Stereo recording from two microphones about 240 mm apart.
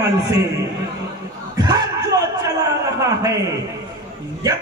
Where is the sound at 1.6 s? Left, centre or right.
Centre.